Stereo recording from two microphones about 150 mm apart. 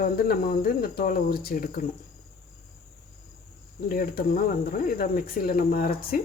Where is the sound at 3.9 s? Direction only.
75° left (ahead or behind).